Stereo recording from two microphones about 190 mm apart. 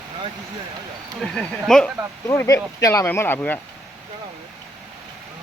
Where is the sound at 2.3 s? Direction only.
15° left (ahead or behind).